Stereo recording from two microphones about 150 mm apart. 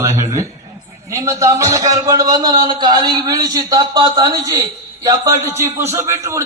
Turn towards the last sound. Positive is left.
turn(degrees=-20)  # may be behind; listen again after turning